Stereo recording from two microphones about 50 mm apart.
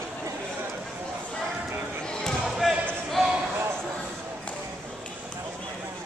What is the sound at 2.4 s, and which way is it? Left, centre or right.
Basketball bounce, centre.